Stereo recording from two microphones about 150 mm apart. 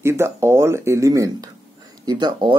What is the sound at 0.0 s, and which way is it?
Speech, 20° right (ahead or behind).